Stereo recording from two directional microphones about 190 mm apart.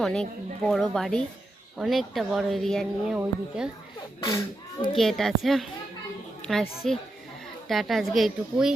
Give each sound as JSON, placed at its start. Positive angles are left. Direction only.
{"t": 0.0, "sound": "speech", "side_deg": 5}
{"t": 4.2, "sound": "a child's voice", "side_deg": 20}
{"t": 4.9, "sound": "a woman's voice", "side_deg": 0}